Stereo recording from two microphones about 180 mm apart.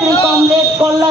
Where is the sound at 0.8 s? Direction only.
20° right (ahead or behind).